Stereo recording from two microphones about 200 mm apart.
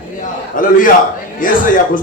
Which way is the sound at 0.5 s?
45° left (ahead or behind).